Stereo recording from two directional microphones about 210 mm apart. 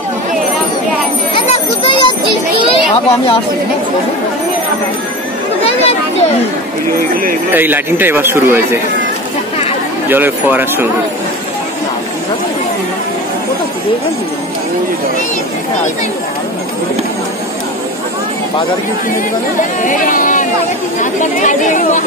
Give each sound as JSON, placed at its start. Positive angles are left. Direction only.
{"t": 1.3, "sound": "a sound", "side_deg": 25}
{"t": 2.7, "sound": "children playing", "side_deg": 25}
{"t": 5.6, "sound": "speech", "side_deg": 30}
{"t": 7.5, "sound": "speech", "side_deg": -10}
{"t": 10.0, "sound": "speech", "side_deg": -10}
{"t": 19.8, "sound": "speech", "side_deg": 40}